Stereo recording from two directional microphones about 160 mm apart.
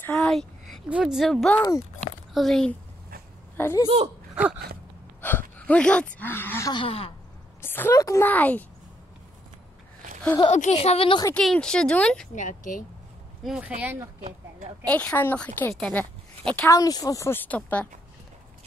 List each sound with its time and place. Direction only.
0.0 s a sound: 5° left (ahead or behind)
0.8 s speech: 5° right (ahead or behind)
3.5 s a woman's voice: 15° left (ahead or behind)
5.2 s speech: 10° left (ahead or behind)
6.7 s speech: 35° left (ahead or behind)
7.6 s a woman's voice: 15° left (ahead or behind)
10.5 s speech: 45° left (ahead or behind)
11.3 s speech: 5° left (ahead or behind)
12.4 s speech: 55° left (ahead or behind)
13.4 s speech: 5° right (ahead or behind)
14.9 s a woman's voice: 10° left (ahead or behind)
16.7 s a woman's voice: 20° left (ahead or behind)